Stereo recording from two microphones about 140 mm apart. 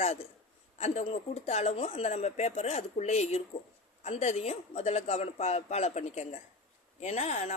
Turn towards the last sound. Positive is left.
turn(degrees=55)  # may be behind; listen again after turning